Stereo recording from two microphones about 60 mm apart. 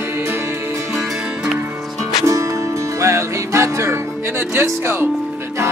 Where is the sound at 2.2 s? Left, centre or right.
Right.